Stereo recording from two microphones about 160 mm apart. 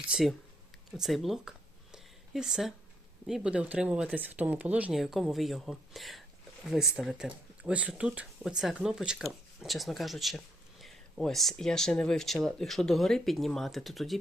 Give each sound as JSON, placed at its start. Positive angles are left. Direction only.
{"t": 0.1, "sound": "speech", "side_deg": 0}
{"t": 0.9, "sound": "a sound", "side_deg": 0}
{"t": 3.2, "sound": "speech", "side_deg": -5}